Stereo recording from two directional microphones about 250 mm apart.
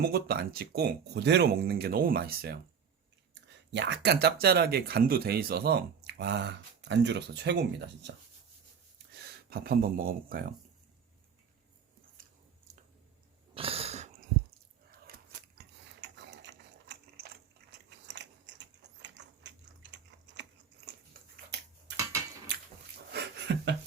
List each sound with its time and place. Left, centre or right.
0.0 s speech: right
3.7 s speech: right
9.2 s speech: right
13.5 s a sound: right
15.0 s ratchet: right
23.1 s a sound: right